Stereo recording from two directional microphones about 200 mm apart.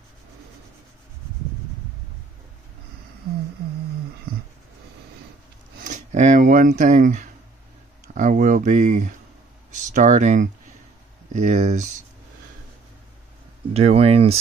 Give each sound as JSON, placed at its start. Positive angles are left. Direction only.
{"t": 5.8, "sound": "a sound", "side_deg": -40}
{"t": 6.8, "sound": "speech", "side_deg": -40}
{"t": 13.7, "sound": "speech", "side_deg": -30}